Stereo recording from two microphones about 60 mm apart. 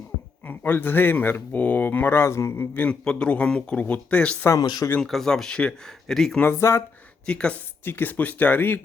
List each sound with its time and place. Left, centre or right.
0.4 s speech: left
2.7 s speech: left
3.0 s speech: centre
4.5 s speech: left
4.9 s speech: centre
6.6 s speech: left
7.3 s speech: centre
7.9 s speech: left